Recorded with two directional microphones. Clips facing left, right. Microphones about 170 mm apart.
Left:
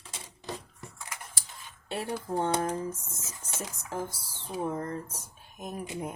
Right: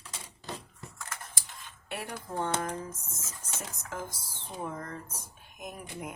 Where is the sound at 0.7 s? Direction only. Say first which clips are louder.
Even; 15° left (ahead or behind).